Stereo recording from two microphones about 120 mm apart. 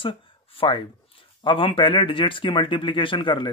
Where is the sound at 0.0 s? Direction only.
45° left (ahead or behind).